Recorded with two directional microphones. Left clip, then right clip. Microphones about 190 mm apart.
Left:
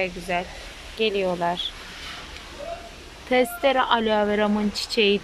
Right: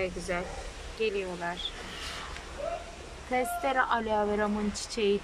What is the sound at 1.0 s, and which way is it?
Speech, 20° left (ahead or behind).